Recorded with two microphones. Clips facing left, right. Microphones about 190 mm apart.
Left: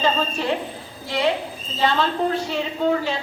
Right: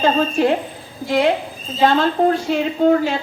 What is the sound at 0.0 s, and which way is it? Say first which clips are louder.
A woman's voice: right 6 dB; 50° right (ahead or behind).